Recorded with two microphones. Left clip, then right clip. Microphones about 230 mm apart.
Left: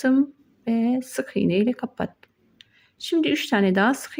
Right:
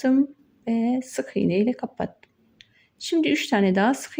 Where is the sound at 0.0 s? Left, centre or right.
Centre.